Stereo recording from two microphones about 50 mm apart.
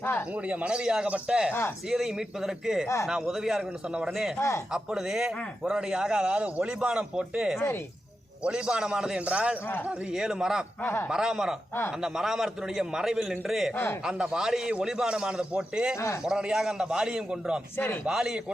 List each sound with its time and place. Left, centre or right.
0.0 s speech: left
0.4 s speech: right
1.9 s a man's voice: centre
4.4 s speech: left
4.7 s a man's voice: centre
8.4 s a man's voice: centre
10.1 s a man's voice: centre